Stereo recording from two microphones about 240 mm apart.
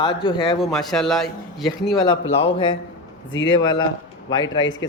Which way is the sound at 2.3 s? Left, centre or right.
Left.